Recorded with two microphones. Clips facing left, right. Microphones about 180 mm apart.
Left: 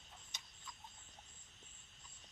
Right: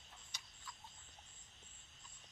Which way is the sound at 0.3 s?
20° left (ahead or behind).